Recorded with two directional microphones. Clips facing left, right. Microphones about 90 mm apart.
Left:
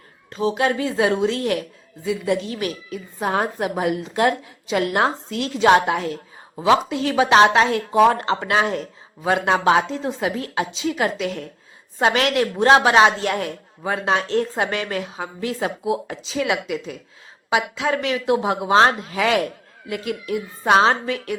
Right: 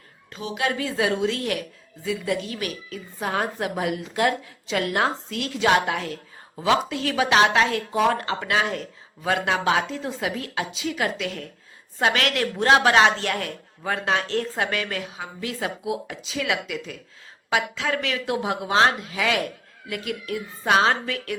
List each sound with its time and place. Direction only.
0.3 s a woman's voice: 30° left (ahead or behind)
19.9 s a woman's voice: 25° left (ahead or behind)